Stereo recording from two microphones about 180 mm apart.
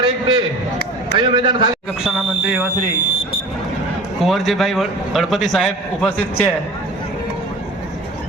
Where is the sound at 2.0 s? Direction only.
10° right (ahead or behind).